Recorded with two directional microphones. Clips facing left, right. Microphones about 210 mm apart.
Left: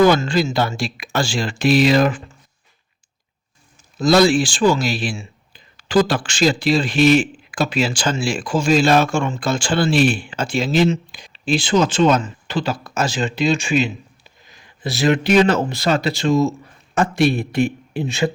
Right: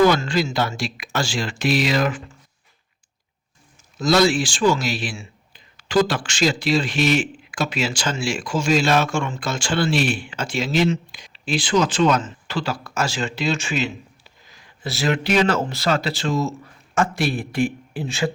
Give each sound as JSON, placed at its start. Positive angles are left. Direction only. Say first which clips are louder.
{"t": 0.1, "sound": "speech", "louder": "left 3 dB", "side_deg": 30}
{"t": 4.3, "sound": "speech", "louder": "left 3 dB", "side_deg": 30}
{"t": 9.9, "sound": "speech", "louder": "left 5 dB", "side_deg": 0}
{"t": 10.2, "sound": "speech", "louder": "left 4 dB", "side_deg": 30}